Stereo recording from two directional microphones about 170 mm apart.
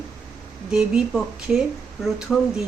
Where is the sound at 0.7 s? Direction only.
5° right (ahead or behind).